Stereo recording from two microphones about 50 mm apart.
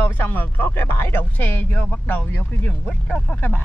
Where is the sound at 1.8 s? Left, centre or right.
Left.